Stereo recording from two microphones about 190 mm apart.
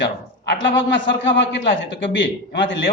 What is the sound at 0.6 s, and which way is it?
A man's voice, 70° left (ahead or behind).